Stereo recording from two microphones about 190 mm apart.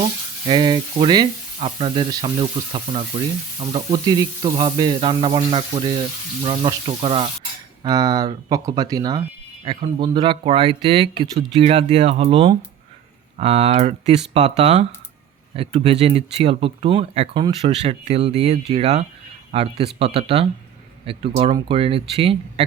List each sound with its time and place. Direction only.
0.0 s frying: 25° right (ahead or behind)
7.9 s frying: 20° right (ahead or behind)
9.6 s speech: 25° right (ahead or behind)
21.1 s frying: 30° right (ahead or behind)